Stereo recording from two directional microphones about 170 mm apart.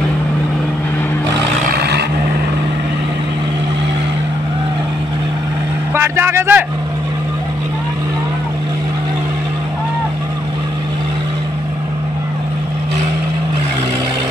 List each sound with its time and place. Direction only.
1.7 s vehicle: 70° right (ahead or behind)
5.9 s vehicle: 15° right (ahead or behind)